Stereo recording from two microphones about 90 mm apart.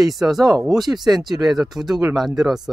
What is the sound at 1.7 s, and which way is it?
Speech, 45° right (ahead or behind).